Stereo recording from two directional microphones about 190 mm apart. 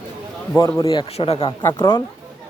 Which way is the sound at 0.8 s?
25° left (ahead or behind).